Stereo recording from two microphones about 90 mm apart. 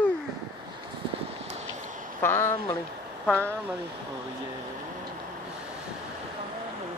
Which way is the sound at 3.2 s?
15° left (ahead or behind).